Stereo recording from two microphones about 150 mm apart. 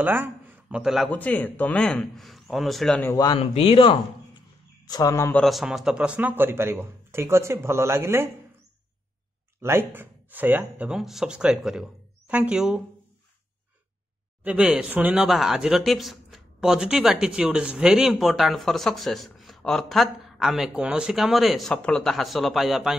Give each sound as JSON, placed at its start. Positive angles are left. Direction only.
{"t": 0.0, "sound": "speech", "side_deg": -10}
{"t": 1.1, "sound": "speech", "side_deg": 10}
{"t": 3.0, "sound": "speech", "side_deg": 25}
{"t": 3.3, "sound": "speech", "side_deg": 40}
{"t": 4.8, "sound": "speech", "side_deg": 25}
{"t": 5.4, "sound": "speech", "side_deg": 0}
{"t": 9.6, "sound": "speech", "side_deg": -15}
{"t": 14.4, "sound": "speech", "side_deg": -5}